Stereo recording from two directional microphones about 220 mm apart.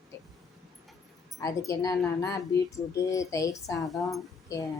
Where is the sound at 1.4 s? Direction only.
15° left (ahead or behind).